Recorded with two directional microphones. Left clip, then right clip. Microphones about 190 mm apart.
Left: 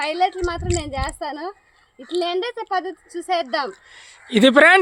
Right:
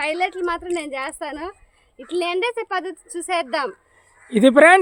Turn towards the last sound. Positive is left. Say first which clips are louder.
# even
turn(degrees=0)  # may be behind; listen again after turning